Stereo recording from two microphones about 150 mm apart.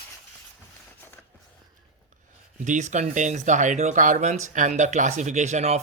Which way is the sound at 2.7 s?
55° right (ahead or behind).